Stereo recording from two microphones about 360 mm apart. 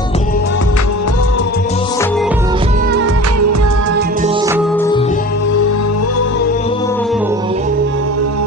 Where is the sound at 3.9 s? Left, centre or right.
Right.